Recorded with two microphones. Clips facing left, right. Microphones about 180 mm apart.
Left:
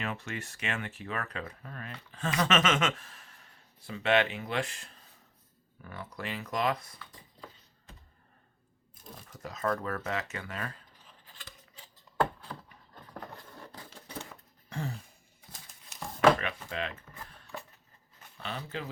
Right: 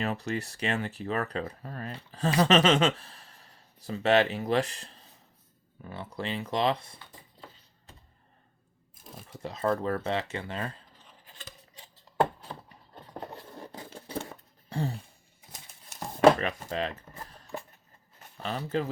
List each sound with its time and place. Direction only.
0.0 s speech: 35° right (ahead or behind)
9.3 s speech: 30° right (ahead or behind)
11.3 s scissors: 20° right (ahead or behind)
13.0 s a sound: 25° right (ahead or behind)
18.3 s speech: 40° right (ahead or behind)